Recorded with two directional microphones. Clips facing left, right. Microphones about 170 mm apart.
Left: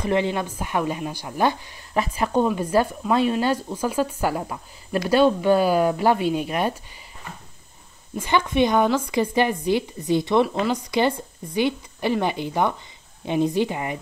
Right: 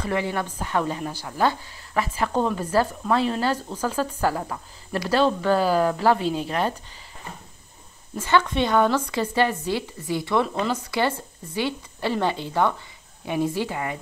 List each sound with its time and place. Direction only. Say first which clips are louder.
0.0 s a woman's voice: left 3 dB; 20° left (ahead or behind)
8.2 s a woman's voice: left 1 dB; 15° left (ahead or behind)